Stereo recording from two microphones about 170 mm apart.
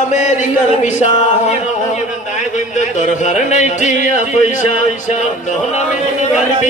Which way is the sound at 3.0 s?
45° left (ahead or behind).